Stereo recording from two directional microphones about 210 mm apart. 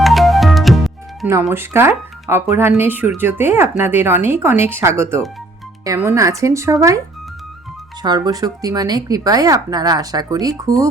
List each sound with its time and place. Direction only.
0.0 s music: centre (ahead or behind)
1.3 s speech: 10° right (ahead or behind)
8.0 s speech: 20° right (ahead or behind)